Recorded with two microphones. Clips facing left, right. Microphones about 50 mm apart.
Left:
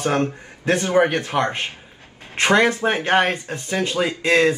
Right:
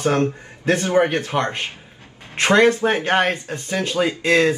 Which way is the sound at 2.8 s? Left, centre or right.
Left.